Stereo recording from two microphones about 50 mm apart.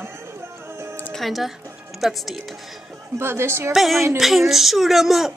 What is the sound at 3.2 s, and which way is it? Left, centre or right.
Speech, right.